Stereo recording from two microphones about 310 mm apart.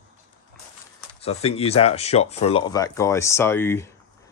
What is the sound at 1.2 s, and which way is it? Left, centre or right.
Speech, centre.